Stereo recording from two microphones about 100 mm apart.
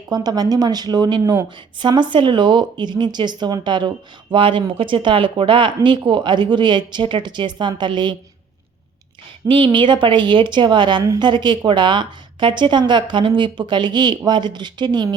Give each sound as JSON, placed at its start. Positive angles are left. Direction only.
{"t": 0.1, "sound": "speech", "side_deg": -40}
{"t": 9.5, "sound": "speech", "side_deg": -55}